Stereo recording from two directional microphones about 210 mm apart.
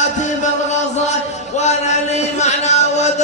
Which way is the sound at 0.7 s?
35° left (ahead or behind).